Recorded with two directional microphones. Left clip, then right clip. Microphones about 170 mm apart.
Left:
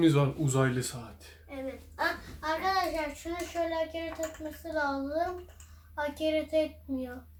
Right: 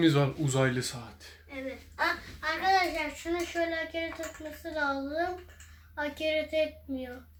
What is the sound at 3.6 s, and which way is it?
Speech, 10° left (ahead or behind).